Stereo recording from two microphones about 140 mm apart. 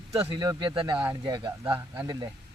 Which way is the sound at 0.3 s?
35° right (ahead or behind).